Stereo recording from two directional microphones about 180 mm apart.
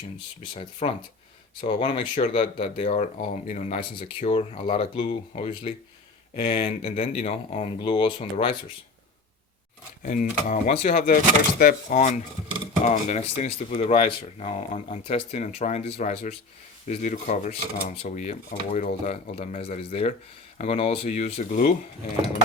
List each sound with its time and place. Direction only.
0.5 s speech: 30° left (ahead or behind)
10.0 s speech: 50° left (ahead or behind)